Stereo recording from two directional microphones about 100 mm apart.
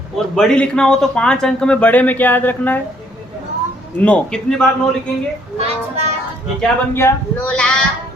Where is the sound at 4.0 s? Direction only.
10° left (ahead or behind).